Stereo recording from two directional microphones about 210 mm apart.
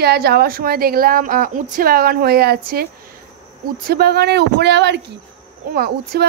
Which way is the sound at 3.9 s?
50° right (ahead or behind).